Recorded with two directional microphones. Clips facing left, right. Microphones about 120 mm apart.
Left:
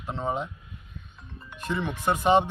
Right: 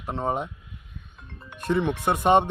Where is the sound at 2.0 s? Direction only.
60° right (ahead or behind).